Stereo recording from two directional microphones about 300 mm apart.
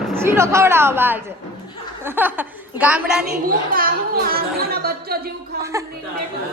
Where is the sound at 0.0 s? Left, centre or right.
Centre.